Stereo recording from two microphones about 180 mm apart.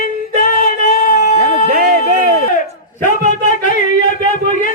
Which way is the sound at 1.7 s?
50° right (ahead or behind).